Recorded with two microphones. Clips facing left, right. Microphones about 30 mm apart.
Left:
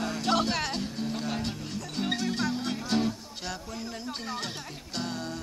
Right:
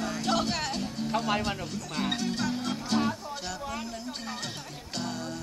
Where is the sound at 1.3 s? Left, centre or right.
Right.